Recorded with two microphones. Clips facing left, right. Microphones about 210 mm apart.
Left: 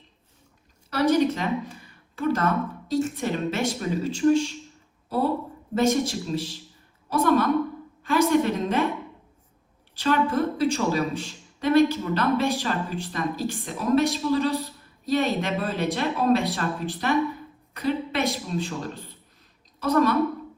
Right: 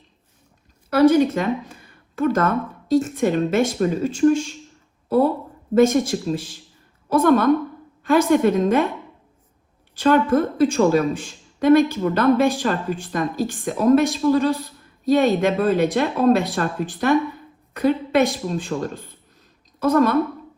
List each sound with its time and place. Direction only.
0.9 s speech: 45° right (ahead or behind)
10.0 s speech: 50° right (ahead or behind)